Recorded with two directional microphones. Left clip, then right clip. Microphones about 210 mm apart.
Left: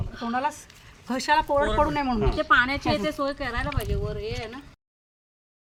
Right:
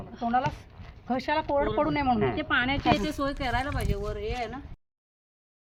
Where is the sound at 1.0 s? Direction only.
30° right (ahead or behind).